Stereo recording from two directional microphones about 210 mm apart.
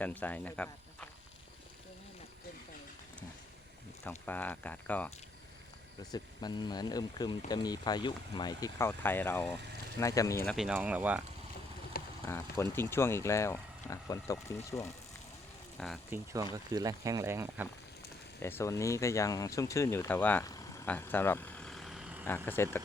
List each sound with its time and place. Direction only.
0.0 s speech: 10° left (ahead or behind)
4.3 s speech: 10° left (ahead or behind)
6.0 s speech: 20° left (ahead or behind)
10.4 s speech: centre (ahead or behind)
12.2 s speech: 10° left (ahead or behind)
15.8 s speech: centre (ahead or behind)
16.1 s speech: 15° right (ahead or behind)
18.3 s speech: 10° left (ahead or behind)
22.3 s speech: 10° left (ahead or behind)